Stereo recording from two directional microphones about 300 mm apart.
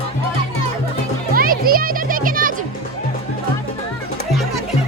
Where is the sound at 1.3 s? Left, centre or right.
Right.